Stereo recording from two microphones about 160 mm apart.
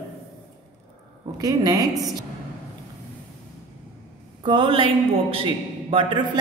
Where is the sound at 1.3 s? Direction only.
25° right (ahead or behind).